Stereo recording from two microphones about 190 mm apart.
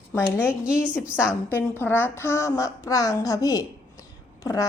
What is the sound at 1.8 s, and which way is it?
A woman's voice, 10° left (ahead or behind).